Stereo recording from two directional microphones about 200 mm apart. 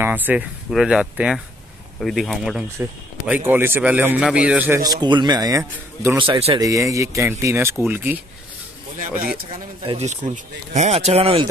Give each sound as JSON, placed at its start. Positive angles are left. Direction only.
{"t": 0.0, "sound": "a man's voice", "side_deg": -10}
{"t": 9.1, "sound": "speech", "side_deg": -45}
{"t": 9.5, "sound": "speech", "side_deg": -30}